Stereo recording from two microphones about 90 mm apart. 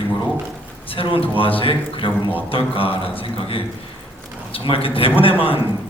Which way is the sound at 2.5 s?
85° left.